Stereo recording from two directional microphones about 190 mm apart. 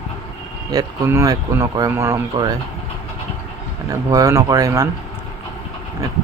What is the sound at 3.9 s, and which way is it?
Speech, 15° right (ahead or behind).